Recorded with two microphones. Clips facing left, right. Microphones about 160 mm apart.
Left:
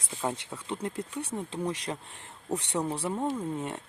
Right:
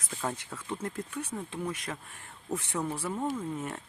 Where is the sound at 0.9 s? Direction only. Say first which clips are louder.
Left 2 dB; 30° left (ahead or behind).